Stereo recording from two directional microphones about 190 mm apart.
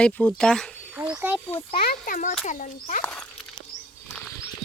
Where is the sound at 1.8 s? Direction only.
50° left (ahead or behind).